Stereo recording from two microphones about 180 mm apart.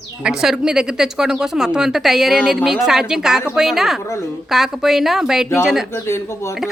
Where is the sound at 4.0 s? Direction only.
15° left (ahead or behind).